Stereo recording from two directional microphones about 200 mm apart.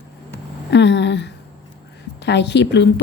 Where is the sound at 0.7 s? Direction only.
60° left (ahead or behind).